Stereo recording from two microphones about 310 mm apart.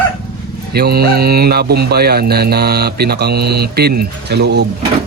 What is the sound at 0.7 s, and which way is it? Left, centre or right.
Speech, right.